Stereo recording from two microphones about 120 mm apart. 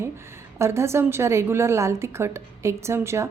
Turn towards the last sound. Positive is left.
turn(degrees=-20)  # may be behind; listen again after turning